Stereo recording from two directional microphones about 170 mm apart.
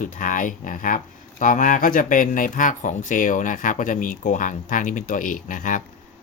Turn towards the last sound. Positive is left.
turn(degrees=50)  # may be behind; listen again after turning